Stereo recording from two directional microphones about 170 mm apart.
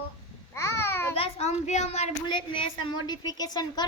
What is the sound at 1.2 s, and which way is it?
A child's voice, 40° left (ahead or behind).